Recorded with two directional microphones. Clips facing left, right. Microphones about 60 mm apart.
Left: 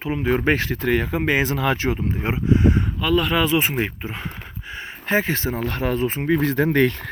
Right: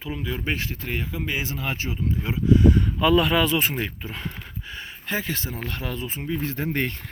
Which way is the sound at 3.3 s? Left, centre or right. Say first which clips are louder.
Left 2 dB; centre.